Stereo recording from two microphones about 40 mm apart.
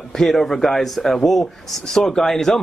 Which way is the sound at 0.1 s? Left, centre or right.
Centre.